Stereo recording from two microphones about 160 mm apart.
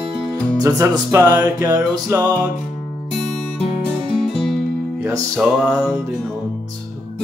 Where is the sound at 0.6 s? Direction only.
20° right (ahead or behind).